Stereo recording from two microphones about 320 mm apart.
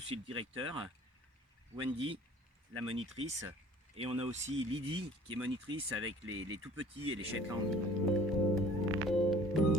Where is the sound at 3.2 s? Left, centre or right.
Right.